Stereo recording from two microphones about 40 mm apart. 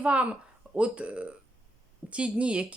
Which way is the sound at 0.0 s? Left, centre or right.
Right.